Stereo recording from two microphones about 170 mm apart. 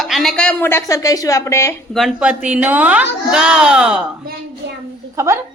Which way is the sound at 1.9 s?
Centre (ahead or behind).